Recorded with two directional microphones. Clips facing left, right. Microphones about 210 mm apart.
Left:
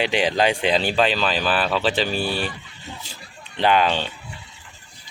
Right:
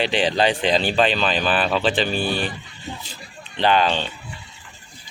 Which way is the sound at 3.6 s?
5° left (ahead or behind).